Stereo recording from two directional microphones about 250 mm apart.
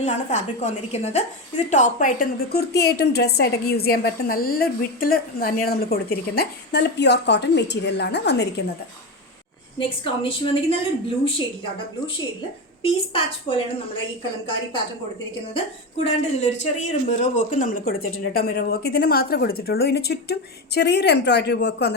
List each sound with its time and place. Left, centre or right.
0.0 s a woman's voice: left
9.7 s a woman's voice: left
16.0 s speech: left